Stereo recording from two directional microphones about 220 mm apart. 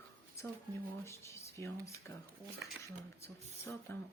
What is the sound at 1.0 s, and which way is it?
Speech, 10° left (ahead or behind).